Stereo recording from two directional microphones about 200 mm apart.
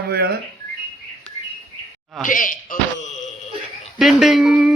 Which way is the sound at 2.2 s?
40° left (ahead or behind).